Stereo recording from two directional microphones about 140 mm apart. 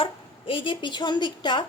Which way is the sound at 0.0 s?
40° left (ahead or behind).